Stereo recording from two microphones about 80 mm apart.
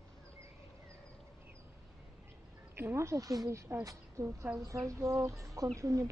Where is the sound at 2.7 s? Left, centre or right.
Right.